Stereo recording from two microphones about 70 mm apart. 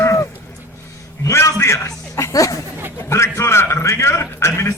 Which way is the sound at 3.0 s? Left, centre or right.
Left.